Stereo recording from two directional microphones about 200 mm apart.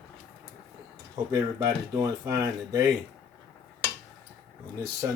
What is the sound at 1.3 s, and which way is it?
Speech, 15° right (ahead or behind).